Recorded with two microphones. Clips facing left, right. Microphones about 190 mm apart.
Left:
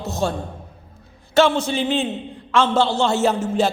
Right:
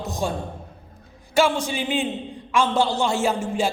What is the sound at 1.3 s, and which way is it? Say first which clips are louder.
A man's voice: left 4 dB; 10° right (ahead or behind).